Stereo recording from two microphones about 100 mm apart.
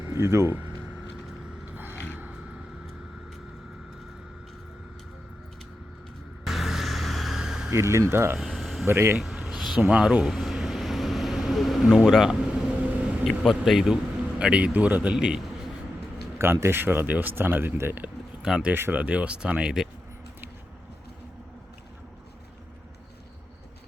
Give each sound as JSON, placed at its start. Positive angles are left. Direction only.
{"t": 0.1, "sound": "a sound", "side_deg": -30}
{"t": 1.7, "sound": "mechanisms", "side_deg": -20}
{"t": 6.4, "sound": "a sound", "side_deg": 0}
{"t": 7.7, "sound": "speech", "side_deg": -30}
{"t": 8.4, "sound": "a sound", "side_deg": 0}
{"t": 8.9, "sound": "speech", "side_deg": -25}
{"t": 9.1, "sound": "a sound", "side_deg": 0}
{"t": 9.8, "sound": "vehicle", "side_deg": -10}
{"t": 12.0, "sound": "a man's voice", "side_deg": 0}
{"t": 16.4, "sound": "speech", "side_deg": -25}
{"t": 18.4, "sound": "a man's voice", "side_deg": -5}
{"t": 18.7, "sound": "a man's voice", "side_deg": -20}